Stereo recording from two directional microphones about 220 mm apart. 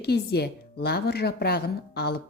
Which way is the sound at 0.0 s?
45° left (ahead or behind).